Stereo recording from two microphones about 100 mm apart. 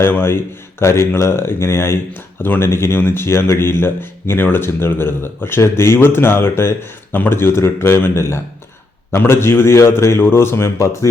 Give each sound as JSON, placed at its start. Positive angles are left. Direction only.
{"t": 0.0, "sound": "speech", "side_deg": 20}